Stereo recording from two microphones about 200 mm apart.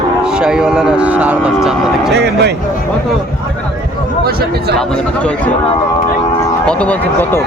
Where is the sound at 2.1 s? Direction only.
60° right (ahead or behind).